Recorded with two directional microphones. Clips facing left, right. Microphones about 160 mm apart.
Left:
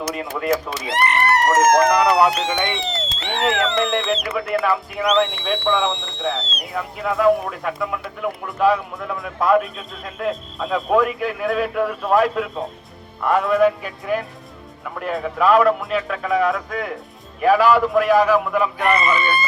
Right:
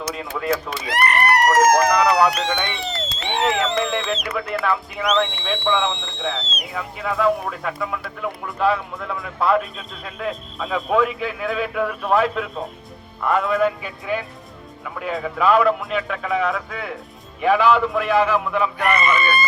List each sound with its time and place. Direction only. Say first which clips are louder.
0.1 s speech: even; 5° left (ahead or behind)
0.9 s speech: even; 25° left (ahead or behind)
2.4 s speech: left 2 dB; centre (ahead or behind)
18.9 s speech: even; 30° left (ahead or behind)